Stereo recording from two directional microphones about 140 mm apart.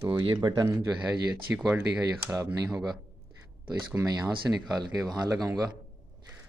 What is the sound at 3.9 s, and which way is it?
Speech, 25° right (ahead or behind).